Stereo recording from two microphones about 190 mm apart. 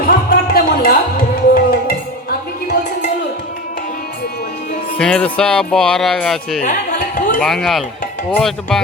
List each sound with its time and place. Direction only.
0.0 s music: 50° left (ahead or behind)
4.9 s speech: 5° left (ahead or behind)
6.6 s a sound: 45° left (ahead or behind)
7.4 s speech: centre (ahead or behind)